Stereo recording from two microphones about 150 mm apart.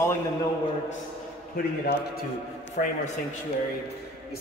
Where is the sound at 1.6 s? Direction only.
75° left (ahead or behind).